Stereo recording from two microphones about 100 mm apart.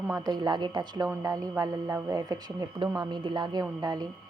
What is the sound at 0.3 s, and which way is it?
A woman's voice, 45° right (ahead or behind).